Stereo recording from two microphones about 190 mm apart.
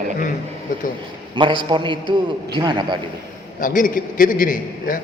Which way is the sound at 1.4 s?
25° right (ahead or behind).